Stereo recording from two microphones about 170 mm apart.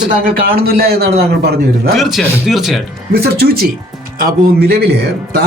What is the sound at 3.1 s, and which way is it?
A man's voice, 65° right (ahead or behind).